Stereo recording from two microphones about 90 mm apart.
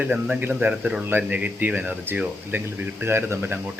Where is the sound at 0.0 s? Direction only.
15° right (ahead or behind).